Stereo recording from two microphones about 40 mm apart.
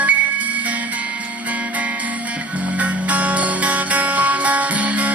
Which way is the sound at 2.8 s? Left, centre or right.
Right.